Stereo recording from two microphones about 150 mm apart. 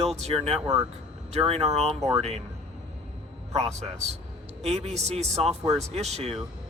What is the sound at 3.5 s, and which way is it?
Speech, 45° right (ahead or behind).